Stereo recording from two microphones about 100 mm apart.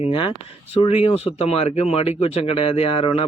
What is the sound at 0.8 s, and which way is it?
Speech, 85° left.